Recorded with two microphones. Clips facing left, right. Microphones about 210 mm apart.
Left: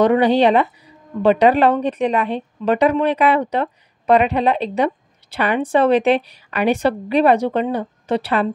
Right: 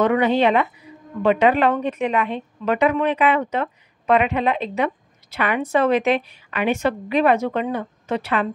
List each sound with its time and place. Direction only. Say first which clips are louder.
0.0 s a woman's voice: left 4 dB; 35° left (ahead or behind)